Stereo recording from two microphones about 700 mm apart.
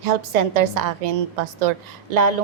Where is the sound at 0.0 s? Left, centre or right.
Right.